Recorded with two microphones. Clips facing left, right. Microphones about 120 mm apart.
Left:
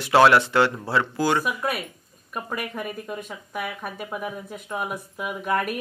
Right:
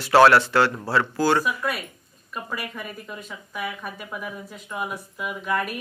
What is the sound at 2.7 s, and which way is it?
Speech, 55° left (ahead or behind).